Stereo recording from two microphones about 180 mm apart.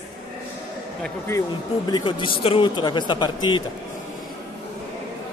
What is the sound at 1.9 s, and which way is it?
Speech, 25° left (ahead or behind).